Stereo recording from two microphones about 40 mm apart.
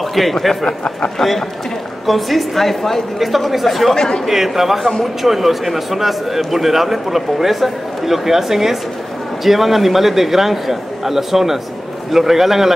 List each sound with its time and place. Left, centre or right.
0.1 s a man's voice: centre
0.7 s speech: left
1.1 s a man's voice: centre
3.9 s speech: centre
4.3 s a man's voice: centre